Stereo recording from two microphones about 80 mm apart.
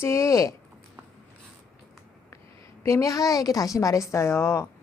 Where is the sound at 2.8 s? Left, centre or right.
Left.